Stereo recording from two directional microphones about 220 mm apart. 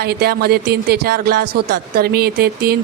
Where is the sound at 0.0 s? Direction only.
45° right (ahead or behind).